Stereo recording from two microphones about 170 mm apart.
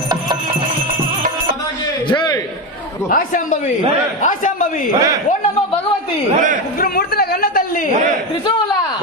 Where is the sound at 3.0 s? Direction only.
50° left (ahead or behind).